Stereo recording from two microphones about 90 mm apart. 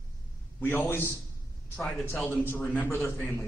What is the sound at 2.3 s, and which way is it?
Speech, 25° left (ahead or behind).